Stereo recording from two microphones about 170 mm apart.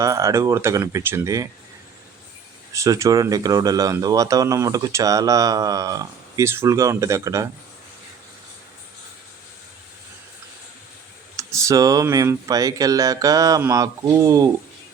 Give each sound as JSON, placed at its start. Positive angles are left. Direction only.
{"t": 0.0, "sound": "speech", "side_deg": -20}
{"t": 2.7, "sound": "speech", "side_deg": -20}
{"t": 11.3, "sound": "speech", "side_deg": -20}